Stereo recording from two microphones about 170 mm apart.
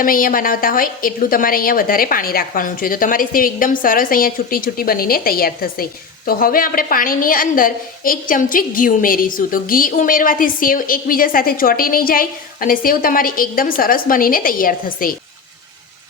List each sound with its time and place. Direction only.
0.0 s a woman's voice: 55° left (ahead or behind)